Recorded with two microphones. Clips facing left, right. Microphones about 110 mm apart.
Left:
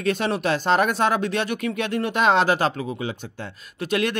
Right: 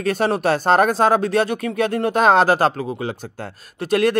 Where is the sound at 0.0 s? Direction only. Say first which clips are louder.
Right 4 dB; 40° right (ahead or behind).